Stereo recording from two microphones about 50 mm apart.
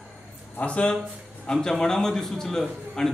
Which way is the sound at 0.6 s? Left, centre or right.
Left.